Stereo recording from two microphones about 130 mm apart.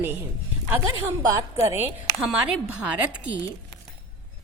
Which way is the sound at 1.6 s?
20° right (ahead or behind).